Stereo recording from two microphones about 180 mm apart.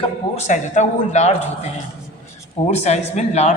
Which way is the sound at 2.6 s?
40° left (ahead or behind).